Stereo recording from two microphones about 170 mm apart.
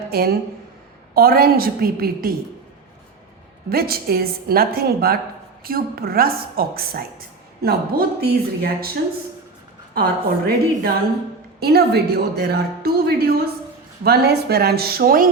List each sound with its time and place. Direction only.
0.1 s a woman's voice: 65° right (ahead or behind)
3.7 s a woman's voice: 65° right (ahead or behind)
9.9 s a woman's voice: 60° right (ahead or behind)